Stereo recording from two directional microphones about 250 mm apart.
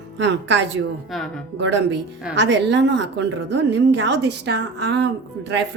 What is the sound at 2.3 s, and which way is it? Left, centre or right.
A woman's voice, right.